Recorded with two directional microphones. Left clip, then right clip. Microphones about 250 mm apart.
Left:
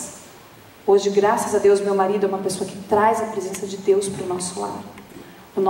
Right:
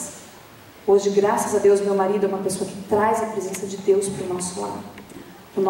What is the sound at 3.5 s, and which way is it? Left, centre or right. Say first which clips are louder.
Speech: left 1 dB; centre.